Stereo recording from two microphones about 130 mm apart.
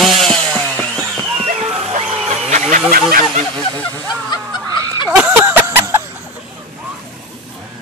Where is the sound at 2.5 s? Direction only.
65° right (ahead or behind).